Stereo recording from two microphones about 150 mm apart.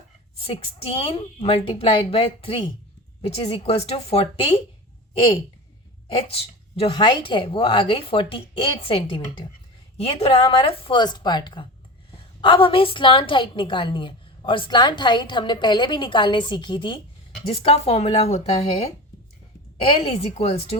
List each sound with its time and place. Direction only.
0.3 s a woman's voice: 40° left (ahead or behind)
6.1 s a woman's voice: 40° left (ahead or behind)